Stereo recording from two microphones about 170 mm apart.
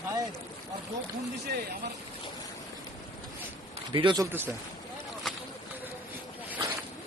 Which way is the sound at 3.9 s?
25° right (ahead or behind).